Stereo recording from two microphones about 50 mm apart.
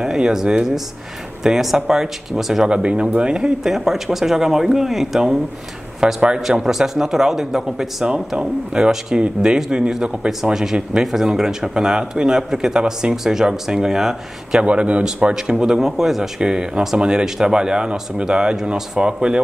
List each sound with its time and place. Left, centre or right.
0.0 s speech: centre
2.7 s speech: right
3.7 s speech: centre
14.6 s speech: right